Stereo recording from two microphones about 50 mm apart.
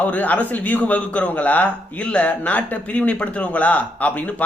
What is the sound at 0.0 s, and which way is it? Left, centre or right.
A man's voice, left.